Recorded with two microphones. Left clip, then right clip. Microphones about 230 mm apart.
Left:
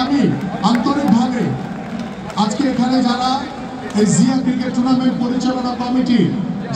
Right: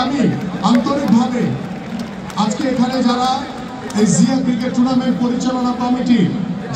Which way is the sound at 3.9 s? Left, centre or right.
Left.